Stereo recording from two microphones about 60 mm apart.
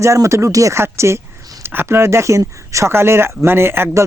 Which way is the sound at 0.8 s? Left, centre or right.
Right.